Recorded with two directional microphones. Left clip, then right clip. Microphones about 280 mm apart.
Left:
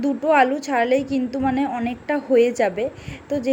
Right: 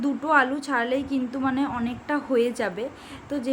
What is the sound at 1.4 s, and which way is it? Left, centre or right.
Speech, right.